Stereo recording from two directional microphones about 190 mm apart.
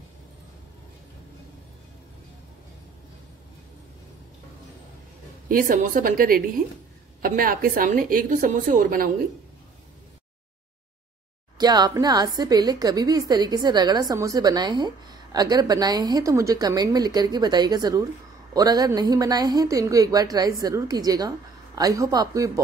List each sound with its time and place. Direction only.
5.5 s a woman's voice: 45° right (ahead or behind)
11.5 s a woman's voice: 20° right (ahead or behind)